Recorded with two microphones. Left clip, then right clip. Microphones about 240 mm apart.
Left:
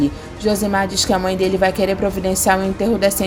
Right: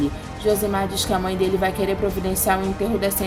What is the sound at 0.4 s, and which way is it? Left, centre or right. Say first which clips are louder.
A woman's voice: left 3 dB; left.